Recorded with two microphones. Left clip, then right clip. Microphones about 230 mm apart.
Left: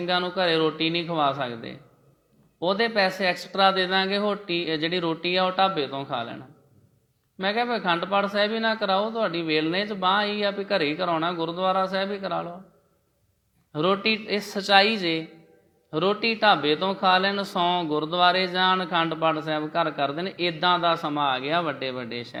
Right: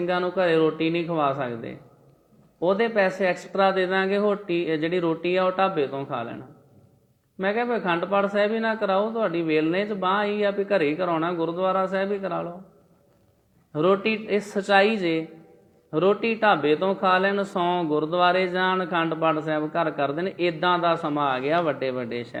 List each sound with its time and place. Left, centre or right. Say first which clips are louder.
0.0 s speech: right 1 dB; left
13.7 s speech: right 1 dB; left